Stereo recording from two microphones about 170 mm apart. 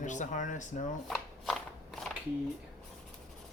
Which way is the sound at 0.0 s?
45° left (ahead or behind).